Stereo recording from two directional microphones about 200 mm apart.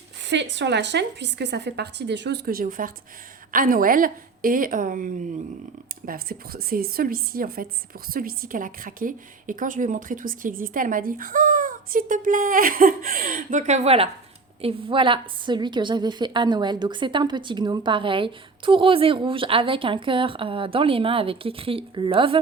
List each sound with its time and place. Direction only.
0.2 s a woman's voice: 60° right (ahead or behind); by 22.4 s 25° right (ahead or behind)